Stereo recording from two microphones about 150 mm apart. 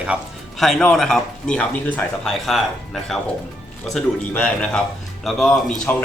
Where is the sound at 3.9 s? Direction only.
5° left (ahead or behind).